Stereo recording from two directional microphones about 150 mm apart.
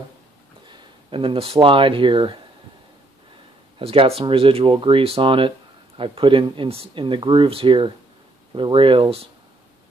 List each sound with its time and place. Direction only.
0.7 s speech: 35° right (ahead or behind)
3.8 s speech: 40° right (ahead or behind)